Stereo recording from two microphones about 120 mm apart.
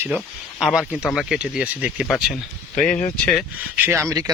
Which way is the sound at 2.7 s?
70° left (ahead or behind).